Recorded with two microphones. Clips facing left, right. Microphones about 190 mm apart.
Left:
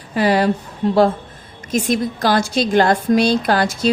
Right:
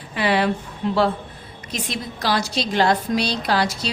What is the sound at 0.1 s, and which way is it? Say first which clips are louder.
Speech: left 4 dB; 40° left (ahead or behind).